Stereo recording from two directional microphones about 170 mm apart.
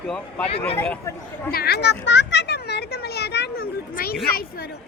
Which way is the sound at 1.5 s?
70° left (ahead or behind).